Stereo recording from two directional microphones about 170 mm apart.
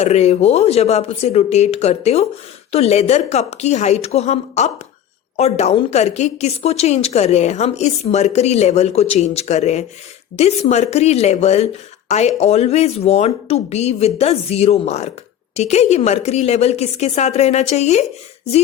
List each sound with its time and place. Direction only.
0.0 s speech: 40° left (ahead or behind)